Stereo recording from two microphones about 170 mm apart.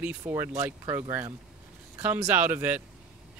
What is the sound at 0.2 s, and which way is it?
Speech, 20° right (ahead or behind).